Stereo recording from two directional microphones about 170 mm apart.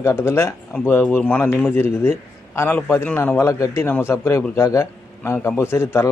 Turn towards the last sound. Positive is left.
turn(degrees=15)  # may be behind; listen again after turning